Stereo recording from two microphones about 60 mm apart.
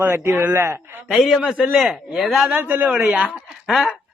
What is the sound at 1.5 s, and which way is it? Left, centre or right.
Speech, centre.